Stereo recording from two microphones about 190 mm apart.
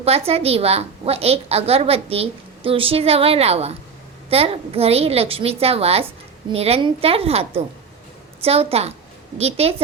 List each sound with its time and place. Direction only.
0.0 s a woman's voice: 30° right (ahead or behind)